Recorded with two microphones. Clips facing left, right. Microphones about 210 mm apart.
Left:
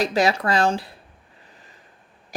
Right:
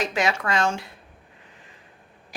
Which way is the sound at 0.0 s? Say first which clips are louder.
Left 4 dB; 35° left (ahead or behind).